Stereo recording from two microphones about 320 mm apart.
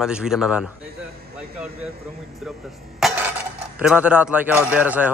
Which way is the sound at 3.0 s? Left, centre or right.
Centre.